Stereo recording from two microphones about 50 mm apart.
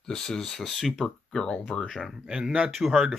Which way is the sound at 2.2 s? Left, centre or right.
Centre.